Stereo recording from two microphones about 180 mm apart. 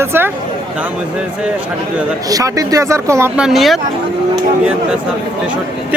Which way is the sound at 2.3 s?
20° right (ahead or behind).